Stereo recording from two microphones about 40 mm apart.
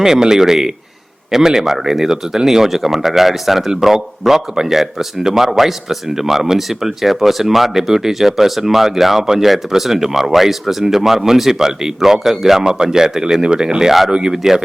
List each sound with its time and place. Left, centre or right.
0.0 s speech: centre